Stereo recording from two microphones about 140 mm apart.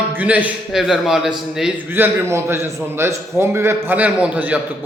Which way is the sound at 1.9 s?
15° right (ahead or behind).